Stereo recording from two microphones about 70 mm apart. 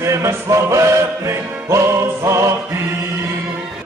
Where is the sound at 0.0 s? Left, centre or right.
Right.